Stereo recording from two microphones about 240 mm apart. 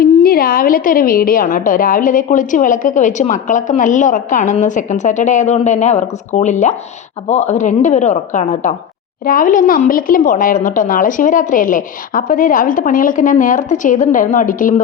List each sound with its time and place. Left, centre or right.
0.0 s a woman's voice: left